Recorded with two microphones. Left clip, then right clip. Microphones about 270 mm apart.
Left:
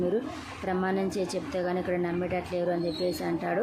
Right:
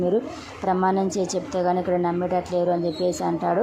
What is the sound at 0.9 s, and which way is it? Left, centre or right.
Speech, centre.